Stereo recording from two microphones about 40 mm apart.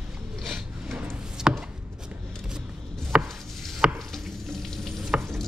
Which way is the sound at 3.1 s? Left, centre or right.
Right.